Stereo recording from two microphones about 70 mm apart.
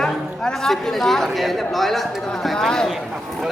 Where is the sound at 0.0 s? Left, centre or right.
Centre.